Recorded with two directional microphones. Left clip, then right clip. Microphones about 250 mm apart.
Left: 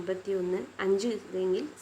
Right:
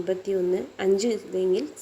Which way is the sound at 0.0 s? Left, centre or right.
Centre.